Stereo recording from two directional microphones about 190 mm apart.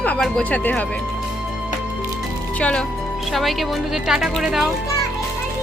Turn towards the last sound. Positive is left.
turn(degrees=0)  # may be behind; listen again after turning